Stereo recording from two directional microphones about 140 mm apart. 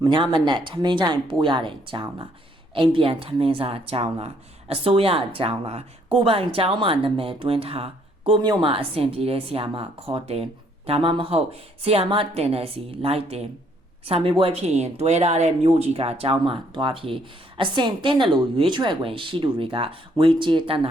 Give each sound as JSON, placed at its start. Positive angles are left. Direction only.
{"t": 0.0, "sound": "speech", "side_deg": -35}